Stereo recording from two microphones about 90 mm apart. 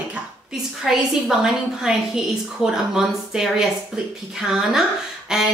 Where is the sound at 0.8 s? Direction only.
5° right (ahead or behind).